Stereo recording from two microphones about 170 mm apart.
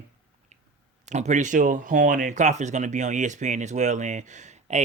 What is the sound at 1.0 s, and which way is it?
Speech, 45° right (ahead or behind).